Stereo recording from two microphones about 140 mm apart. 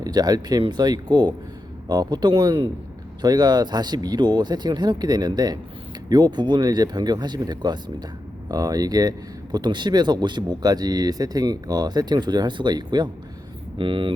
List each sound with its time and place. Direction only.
0.0 s speech: 30° right (ahead or behind)